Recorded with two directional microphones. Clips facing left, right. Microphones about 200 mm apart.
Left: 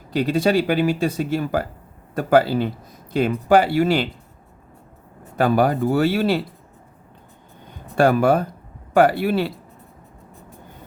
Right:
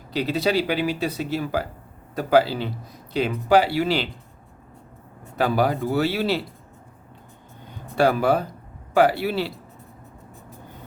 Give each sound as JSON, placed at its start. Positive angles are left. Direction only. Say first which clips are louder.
{"t": 0.1, "sound": "speech", "louder": "left 4 dB", "side_deg": 50}
{"t": 5.4, "sound": "speech", "louder": "left 4 dB", "side_deg": 50}
{"t": 7.9, "sound": "speech", "louder": "left 3 dB", "side_deg": 50}